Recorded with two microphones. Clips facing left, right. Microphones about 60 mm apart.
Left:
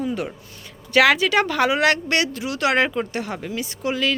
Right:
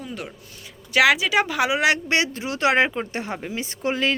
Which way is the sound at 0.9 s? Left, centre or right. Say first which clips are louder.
Left 2 dB; centre.